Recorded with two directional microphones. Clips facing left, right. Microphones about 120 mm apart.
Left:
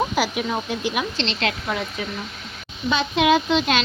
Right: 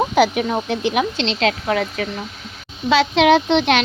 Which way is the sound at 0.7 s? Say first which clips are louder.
Right 5 dB; 65° right (ahead or behind).